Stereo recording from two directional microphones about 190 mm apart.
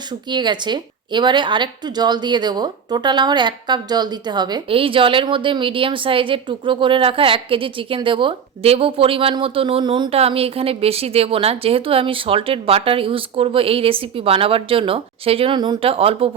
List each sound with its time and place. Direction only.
0.1 s a woman's voice: 25° right (ahead or behind)